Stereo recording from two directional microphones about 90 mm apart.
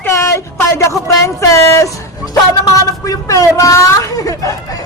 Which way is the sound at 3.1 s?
40° left (ahead or behind).